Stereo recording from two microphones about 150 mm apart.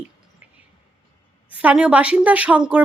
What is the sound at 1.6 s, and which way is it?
Speech, 5° right (ahead or behind).